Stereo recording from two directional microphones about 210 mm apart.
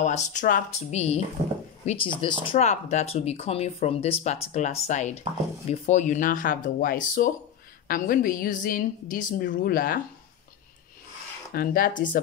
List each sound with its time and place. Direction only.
0.0 s speech: 35° left (ahead or behind)
11.5 s speech: 45° left (ahead or behind)